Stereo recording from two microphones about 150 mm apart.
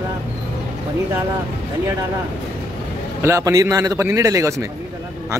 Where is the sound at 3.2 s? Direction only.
20° right (ahead or behind).